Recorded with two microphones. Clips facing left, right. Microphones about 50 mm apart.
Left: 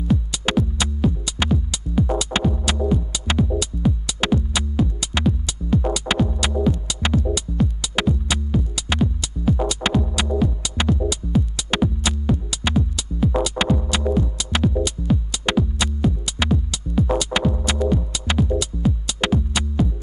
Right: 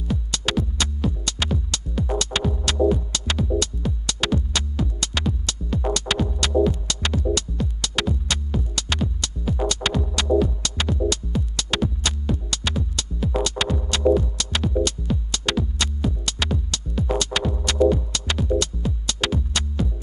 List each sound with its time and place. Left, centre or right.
0.1 s music: centre
6.2 s music: centre